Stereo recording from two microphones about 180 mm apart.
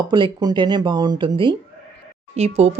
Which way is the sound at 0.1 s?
25° right (ahead or behind).